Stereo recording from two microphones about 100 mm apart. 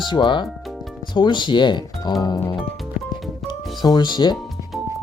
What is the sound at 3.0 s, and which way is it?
Music, 15° right (ahead or behind).